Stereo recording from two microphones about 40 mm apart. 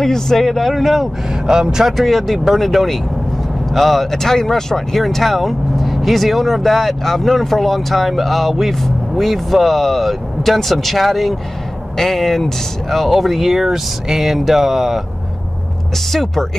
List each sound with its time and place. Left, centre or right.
0.0 s speech: centre
1.5 s speech: centre
1.9 s speech: centre
16.1 s speech: centre